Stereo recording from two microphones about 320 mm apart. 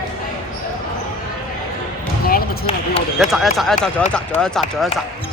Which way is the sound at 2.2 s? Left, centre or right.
Left.